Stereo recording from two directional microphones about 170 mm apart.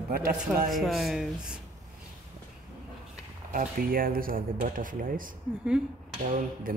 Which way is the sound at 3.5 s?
60° right (ahead or behind).